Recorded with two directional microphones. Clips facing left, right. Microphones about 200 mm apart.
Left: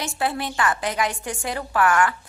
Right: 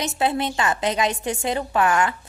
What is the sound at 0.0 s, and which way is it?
A woman's voice, 20° right (ahead or behind).